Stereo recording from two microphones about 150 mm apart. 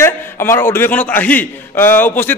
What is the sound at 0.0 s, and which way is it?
A man's voice, 15° left (ahead or behind).